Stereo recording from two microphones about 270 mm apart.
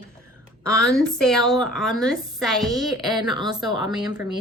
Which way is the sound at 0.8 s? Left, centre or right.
Centre.